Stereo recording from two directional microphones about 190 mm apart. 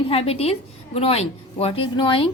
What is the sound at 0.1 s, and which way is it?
A woman's voice, 30° left (ahead or behind).